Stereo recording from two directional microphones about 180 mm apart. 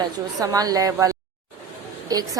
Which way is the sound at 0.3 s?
20° right (ahead or behind).